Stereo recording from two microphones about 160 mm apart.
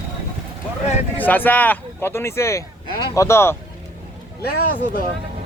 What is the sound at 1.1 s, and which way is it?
Speech, 10° left (ahead or behind).